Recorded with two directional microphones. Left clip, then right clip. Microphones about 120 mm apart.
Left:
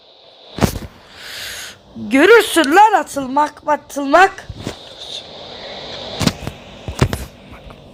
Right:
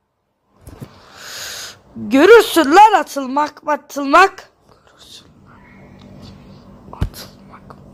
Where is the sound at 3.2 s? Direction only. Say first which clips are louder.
Left 2 dB; 15° right (ahead or behind).